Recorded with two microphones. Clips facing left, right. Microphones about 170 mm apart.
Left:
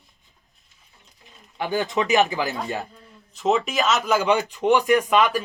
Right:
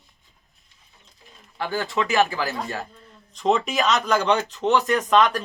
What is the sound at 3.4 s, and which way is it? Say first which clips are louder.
Speech: even; 5° left (ahead or behind).